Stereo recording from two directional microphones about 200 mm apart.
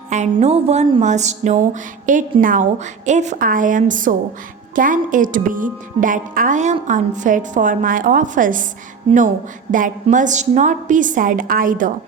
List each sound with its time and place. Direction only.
0.1 s a woman's voice: 35° right (ahead or behind)